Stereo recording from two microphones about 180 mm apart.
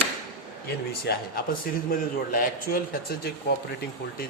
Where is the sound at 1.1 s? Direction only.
55° left (ahead or behind).